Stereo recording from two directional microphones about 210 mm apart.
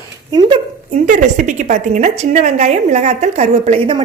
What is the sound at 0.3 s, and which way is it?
A woman's voice, 20° right (ahead or behind).